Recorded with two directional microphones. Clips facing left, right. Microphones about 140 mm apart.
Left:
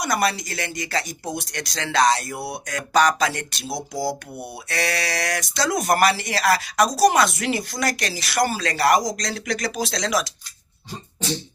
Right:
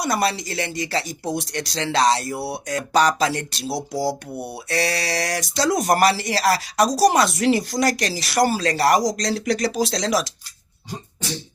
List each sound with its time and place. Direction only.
0.0 s speech: 30° right (ahead or behind)